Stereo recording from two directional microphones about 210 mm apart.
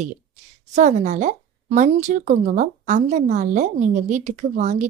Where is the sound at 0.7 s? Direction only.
35° right (ahead or behind).